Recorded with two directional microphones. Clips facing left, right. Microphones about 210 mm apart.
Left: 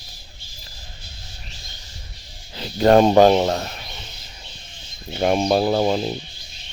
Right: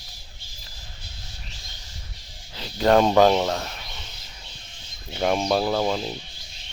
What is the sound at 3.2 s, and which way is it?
Speech, 20° left (ahead or behind).